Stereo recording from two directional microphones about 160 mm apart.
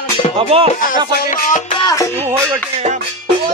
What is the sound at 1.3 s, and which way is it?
Music, 55° left (ahead or behind).